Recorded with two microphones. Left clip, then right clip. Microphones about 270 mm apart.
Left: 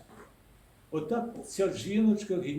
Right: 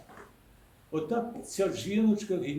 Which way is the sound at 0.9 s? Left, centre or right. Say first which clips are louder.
Right 1 dB; centre.